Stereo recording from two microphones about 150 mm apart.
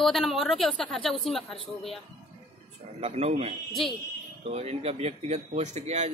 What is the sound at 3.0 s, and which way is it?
Speech, 45° right (ahead or behind).